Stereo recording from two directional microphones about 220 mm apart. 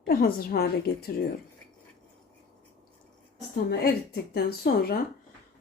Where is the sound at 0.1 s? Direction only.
45° left (ahead or behind).